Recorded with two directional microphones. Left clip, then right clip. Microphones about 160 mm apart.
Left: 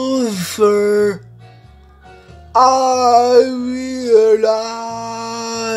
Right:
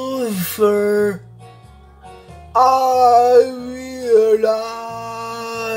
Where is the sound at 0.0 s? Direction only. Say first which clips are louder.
Left 4 dB; 20° left (ahead or behind).